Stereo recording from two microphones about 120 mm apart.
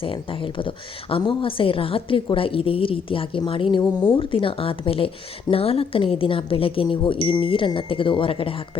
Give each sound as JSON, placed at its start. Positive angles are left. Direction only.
{"t": 0.0, "sound": "speech", "side_deg": 45}